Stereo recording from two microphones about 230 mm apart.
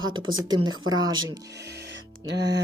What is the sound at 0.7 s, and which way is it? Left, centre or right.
Speech, right.